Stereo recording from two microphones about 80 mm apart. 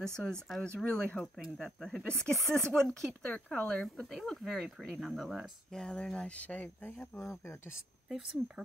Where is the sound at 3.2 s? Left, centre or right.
Centre.